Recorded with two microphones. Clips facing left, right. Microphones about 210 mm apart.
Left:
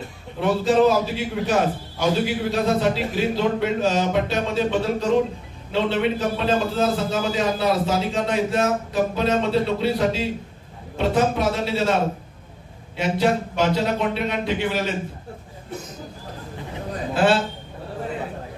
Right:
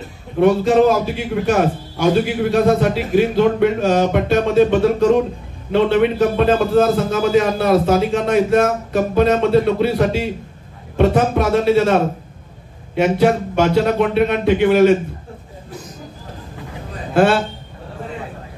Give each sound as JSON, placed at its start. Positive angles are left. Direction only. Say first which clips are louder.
{"t": 0.4, "sound": "a man's voice", "louder": "right 5 dB", "side_deg": -55}
{"t": 17.1, "sound": "a woman's voice", "louder": "right 5 dB", "side_deg": -55}